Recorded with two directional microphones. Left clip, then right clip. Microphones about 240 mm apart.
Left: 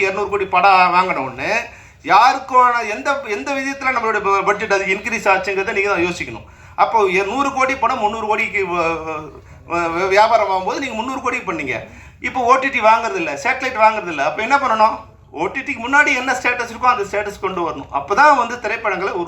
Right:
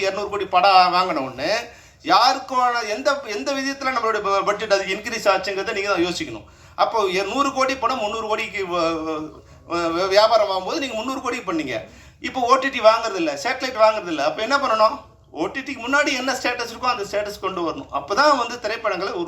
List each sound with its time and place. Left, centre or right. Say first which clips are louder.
0.0 s speech: left 5 dB; right